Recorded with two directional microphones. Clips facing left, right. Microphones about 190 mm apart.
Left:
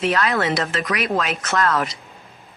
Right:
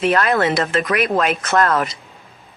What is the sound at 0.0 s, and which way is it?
A woman's voice, 55° right (ahead or behind).